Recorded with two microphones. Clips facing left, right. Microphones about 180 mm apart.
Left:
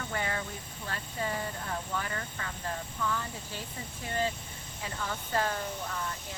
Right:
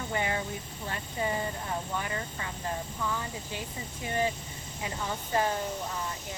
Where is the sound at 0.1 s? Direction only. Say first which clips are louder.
Right 4 dB; 20° right (ahead or behind).